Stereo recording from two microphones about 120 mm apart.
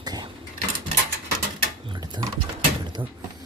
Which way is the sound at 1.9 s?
35° right (ahead or behind).